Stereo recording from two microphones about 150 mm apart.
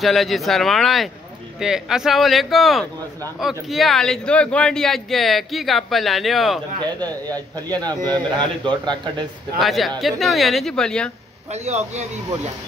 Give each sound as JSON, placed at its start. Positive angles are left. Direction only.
{"t": 0.0, "sound": "a man's voice", "side_deg": 0}
{"t": 7.1, "sound": "a man's voice", "side_deg": 10}
{"t": 7.8, "sound": "a man's voice", "side_deg": -25}
{"t": 9.6, "sound": "a man's voice", "side_deg": 0}
{"t": 11.5, "sound": "speech", "side_deg": -45}